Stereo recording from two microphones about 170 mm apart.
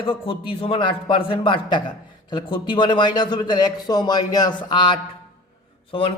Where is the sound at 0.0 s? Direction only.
30° left (ahead or behind).